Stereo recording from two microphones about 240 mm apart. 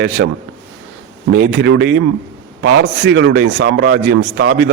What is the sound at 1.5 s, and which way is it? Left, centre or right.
A man's voice, right.